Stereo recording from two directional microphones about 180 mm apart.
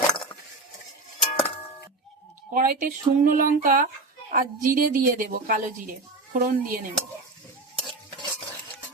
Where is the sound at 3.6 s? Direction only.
50° right (ahead or behind).